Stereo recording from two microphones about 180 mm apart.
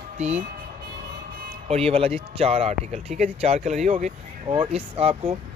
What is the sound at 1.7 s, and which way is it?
Speech, 35° right (ahead or behind).